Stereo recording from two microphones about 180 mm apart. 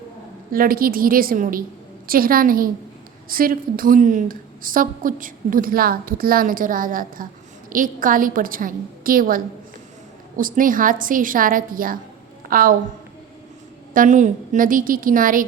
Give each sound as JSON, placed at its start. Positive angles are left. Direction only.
{"t": 0.5, "sound": "a woman's voice", "side_deg": -55}
{"t": 13.9, "sound": "a woman's voice", "side_deg": -45}